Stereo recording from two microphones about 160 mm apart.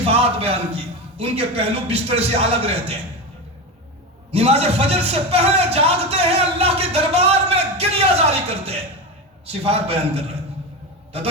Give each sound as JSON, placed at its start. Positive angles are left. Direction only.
{"t": 0.1, "sound": "a man's voice", "side_deg": -40}
{"t": 4.3, "sound": "a man's voice", "side_deg": -40}